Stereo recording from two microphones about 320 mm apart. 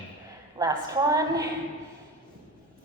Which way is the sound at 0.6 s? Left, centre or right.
Centre.